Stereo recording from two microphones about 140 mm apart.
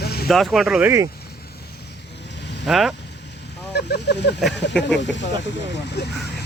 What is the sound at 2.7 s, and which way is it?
Speech, centre (ahead or behind).